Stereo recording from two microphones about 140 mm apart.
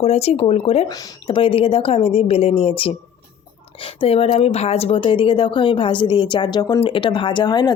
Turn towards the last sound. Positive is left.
turn(degrees=30)  # may be behind; listen again after turning